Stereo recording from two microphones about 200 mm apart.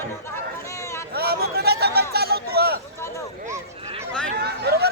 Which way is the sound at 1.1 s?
50° right (ahead or behind).